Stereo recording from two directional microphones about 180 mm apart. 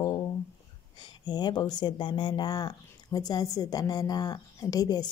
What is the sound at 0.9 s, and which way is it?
Speech, 25° left (ahead or behind).